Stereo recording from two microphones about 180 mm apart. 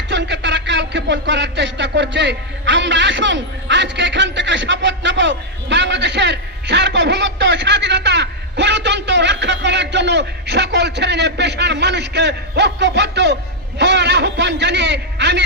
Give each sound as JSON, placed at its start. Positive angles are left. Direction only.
{"t": 0.1, "sound": "speech", "side_deg": -75}